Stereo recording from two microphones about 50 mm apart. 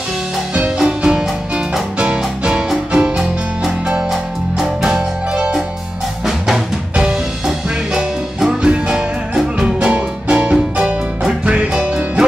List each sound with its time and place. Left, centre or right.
0.7 s music: centre
4.1 s music: centre
5.3 s music: centre
6.2 s drum: centre
7.0 s music: centre